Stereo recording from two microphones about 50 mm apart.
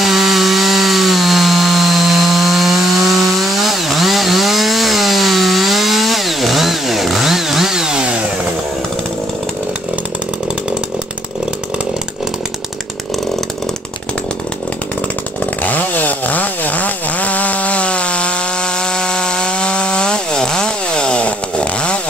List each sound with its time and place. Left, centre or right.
0.0 s chainsaw: centre
15.6 s chainsaw: left
18.8 s wood: centre